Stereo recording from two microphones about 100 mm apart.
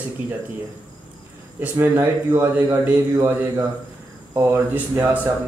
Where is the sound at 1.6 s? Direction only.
20° right (ahead or behind).